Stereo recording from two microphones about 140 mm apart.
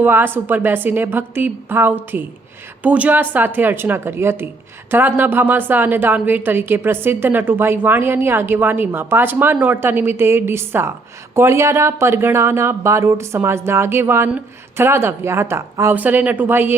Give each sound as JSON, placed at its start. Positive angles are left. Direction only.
{"t": 0.0, "sound": "a woman's voice", "side_deg": -15}